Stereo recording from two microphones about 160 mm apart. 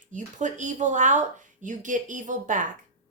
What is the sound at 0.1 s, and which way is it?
Speech, 50° right (ahead or behind).